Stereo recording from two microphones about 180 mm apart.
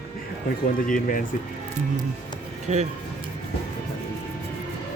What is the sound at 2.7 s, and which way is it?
Speech, 35° right (ahead or behind).